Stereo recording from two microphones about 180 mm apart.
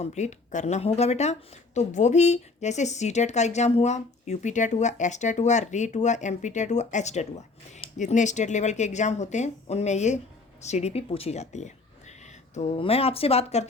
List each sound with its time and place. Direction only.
0.0 s speech: 40° left (ahead or behind)